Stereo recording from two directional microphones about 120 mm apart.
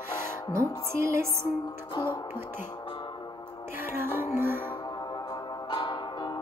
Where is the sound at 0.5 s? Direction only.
25° right (ahead or behind).